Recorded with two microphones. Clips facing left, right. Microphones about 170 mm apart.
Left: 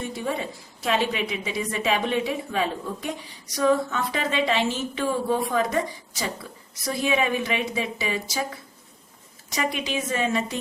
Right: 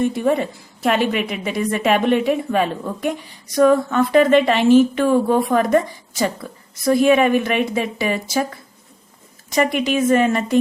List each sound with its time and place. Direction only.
0.1 s a woman's voice: 60° right (ahead or behind)
9.6 s a woman's voice: 55° right (ahead or behind)